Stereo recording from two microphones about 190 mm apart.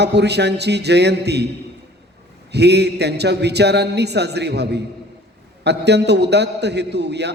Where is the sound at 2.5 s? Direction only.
60° right (ahead or behind).